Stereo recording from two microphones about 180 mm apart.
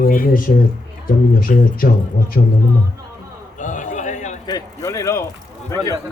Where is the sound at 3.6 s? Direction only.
45° left (ahead or behind).